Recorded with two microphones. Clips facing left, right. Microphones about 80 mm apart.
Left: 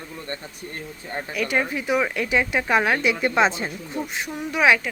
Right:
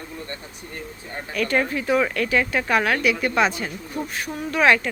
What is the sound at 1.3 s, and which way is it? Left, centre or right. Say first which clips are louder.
Speech: right 2 dB; centre.